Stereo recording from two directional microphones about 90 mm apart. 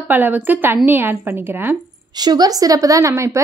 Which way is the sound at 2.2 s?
50° right (ahead or behind).